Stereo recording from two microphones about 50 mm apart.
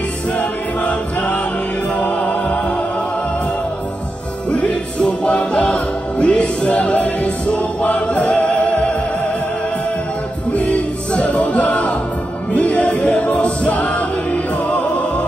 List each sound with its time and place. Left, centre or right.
0.4 s choir: left
2.0 s music: left
4.5 s music: left
10.5 s music: left